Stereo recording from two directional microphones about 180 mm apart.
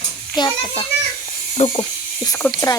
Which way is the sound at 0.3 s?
25° left (ahead or behind).